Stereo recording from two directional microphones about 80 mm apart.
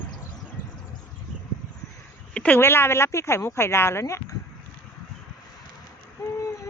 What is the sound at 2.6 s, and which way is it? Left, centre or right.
Speech, left.